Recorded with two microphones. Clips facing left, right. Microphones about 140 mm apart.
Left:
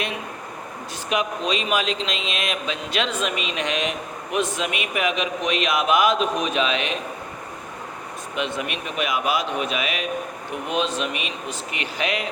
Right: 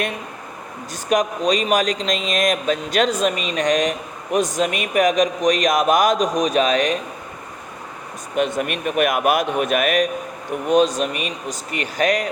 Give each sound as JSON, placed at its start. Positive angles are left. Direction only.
{"t": 1.1, "sound": "a man's voice", "side_deg": -45}
{"t": 8.4, "sound": "a man's voice", "side_deg": -45}